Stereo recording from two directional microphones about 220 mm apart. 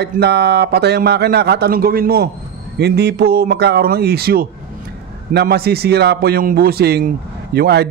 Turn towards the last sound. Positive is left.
turn(degrees=-45)  # may be behind; listen again after turning